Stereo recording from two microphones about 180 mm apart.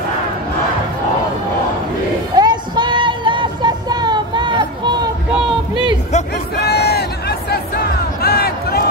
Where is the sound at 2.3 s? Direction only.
25° right (ahead or behind).